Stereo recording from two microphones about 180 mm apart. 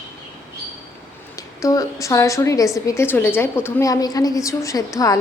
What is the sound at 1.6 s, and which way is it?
A woman's voice, 20° left (ahead or behind).